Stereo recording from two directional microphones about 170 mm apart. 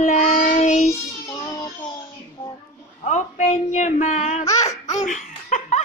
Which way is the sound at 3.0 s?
45° left (ahead or behind).